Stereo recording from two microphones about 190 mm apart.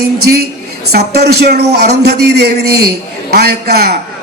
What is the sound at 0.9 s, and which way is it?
A man's voice, 55° right (ahead or behind).